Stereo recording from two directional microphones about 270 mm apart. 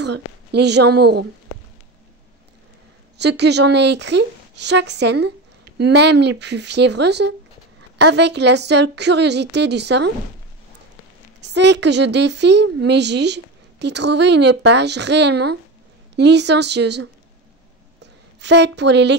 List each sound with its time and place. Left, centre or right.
0.0 s speech: right
3.2 s speech: right
11.5 s speech: right
18.4 s speech: right